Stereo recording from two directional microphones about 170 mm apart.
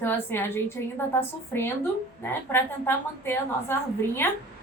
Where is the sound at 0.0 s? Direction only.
10° left (ahead or behind).